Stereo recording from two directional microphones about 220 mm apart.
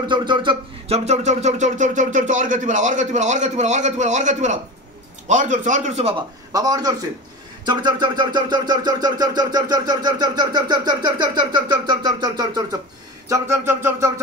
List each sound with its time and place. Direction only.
0.1 s speech: 20° right (ahead or behind)
6.5 s music: 15° right (ahead or behind)
7.6 s a sound: 20° right (ahead or behind)
13.3 s music: 10° right (ahead or behind)